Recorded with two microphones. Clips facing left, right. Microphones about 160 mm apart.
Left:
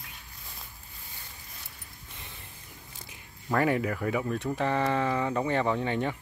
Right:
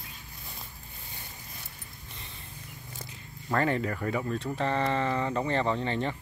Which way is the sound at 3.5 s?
10° left (ahead or behind).